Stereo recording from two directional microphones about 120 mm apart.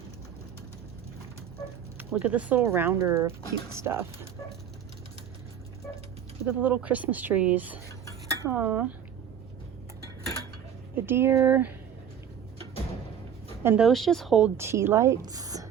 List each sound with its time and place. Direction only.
2.0 s a woman's voice: 10° right (ahead or behind)
6.4 s speech: 15° right (ahead or behind)
10.9 s a woman's voice: 20° right (ahead or behind)
13.7 s speech: centre (ahead or behind)
14.5 s a woman's voice: 20° right (ahead or behind)